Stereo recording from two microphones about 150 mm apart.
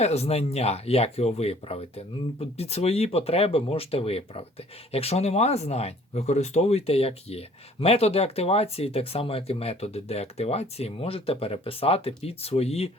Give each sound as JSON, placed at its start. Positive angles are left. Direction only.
{"t": 0.0, "sound": "speech", "side_deg": 45}